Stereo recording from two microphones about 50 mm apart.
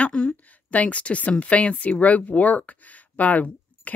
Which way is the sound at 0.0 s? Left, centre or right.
Left.